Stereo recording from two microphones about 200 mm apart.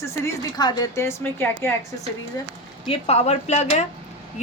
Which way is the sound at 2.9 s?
30° left (ahead or behind).